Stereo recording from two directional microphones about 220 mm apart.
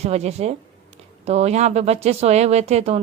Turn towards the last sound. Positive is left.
turn(degrees=-30)  # may be behind; listen again after turning